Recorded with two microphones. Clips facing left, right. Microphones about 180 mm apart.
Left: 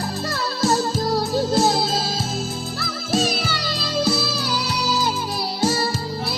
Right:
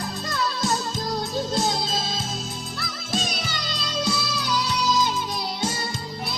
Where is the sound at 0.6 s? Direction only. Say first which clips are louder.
Left 6 dB; 30° left (ahead or behind).